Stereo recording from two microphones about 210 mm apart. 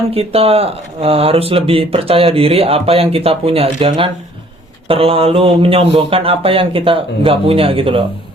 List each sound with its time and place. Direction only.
0.1 s speech: 30° right (ahead or behind)